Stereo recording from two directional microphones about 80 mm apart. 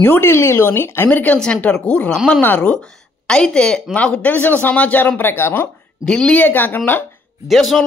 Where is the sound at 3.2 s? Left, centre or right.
Centre; by 5.7 s left.